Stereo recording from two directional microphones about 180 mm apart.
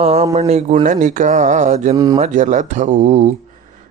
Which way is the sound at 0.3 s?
40° right (ahead or behind).